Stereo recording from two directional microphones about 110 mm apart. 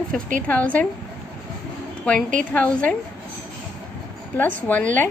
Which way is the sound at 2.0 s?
10° left (ahead or behind).